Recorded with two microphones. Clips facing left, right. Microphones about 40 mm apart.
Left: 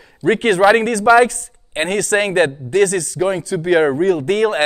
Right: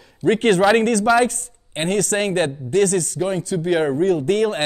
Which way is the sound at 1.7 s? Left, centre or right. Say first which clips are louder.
Left 3 dB; left.